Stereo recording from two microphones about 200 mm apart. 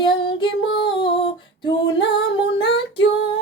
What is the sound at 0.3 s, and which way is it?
Female singing, 25° left (ahead or behind).